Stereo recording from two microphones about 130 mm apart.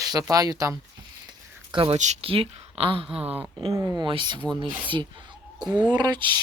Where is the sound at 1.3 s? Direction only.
40° right (ahead or behind).